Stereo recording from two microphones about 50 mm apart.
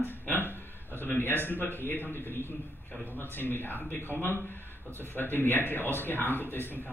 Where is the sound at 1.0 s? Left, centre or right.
Left.